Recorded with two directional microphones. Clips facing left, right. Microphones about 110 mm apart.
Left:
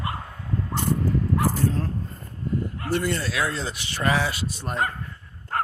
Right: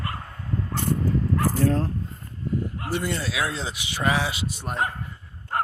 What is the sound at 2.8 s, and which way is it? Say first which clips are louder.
Speech: left 2 dB; 15° right (ahead or behind).